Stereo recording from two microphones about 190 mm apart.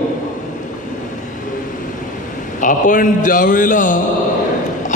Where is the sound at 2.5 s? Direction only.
45° left (ahead or behind).